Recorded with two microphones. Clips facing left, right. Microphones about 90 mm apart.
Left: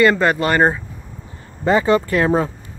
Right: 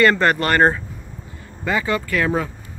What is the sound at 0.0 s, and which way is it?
Speech, 10° left (ahead or behind).